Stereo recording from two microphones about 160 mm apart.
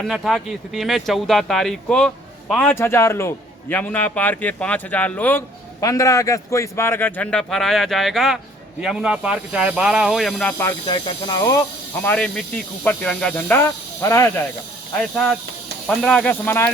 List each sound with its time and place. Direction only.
0.0 s speech: centre (ahead or behind)
5.8 s speech: 20° left (ahead or behind); by 10.5 s centre (ahead or behind)
10.6 s speech: 25° left (ahead or behind)
12.0 s speech: 5° left (ahead or behind)
15.1 s speech: 5° left (ahead or behind)